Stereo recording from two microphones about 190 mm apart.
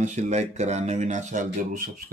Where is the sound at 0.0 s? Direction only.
40° right (ahead or behind).